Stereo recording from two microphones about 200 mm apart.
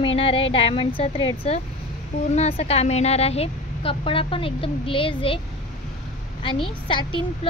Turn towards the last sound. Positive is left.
turn(degrees=25)  # may be behind; listen again after turning